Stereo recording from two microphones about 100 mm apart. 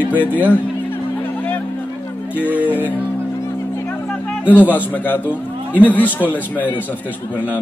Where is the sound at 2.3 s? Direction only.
15° right (ahead or behind).